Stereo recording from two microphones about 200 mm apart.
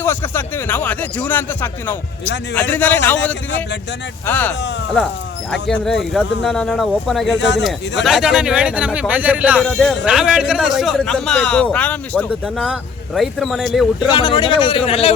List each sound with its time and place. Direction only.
0.0 s speech: 10° left (ahead or behind)
4.3 s speech: 10° left (ahead or behind)
7.3 s speech: 60° left (ahead or behind)
8.0 s speech: centre (ahead or behind)
14.1 s speech: 25° left (ahead or behind)